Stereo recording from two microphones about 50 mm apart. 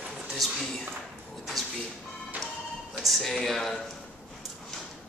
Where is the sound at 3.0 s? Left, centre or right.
Centre.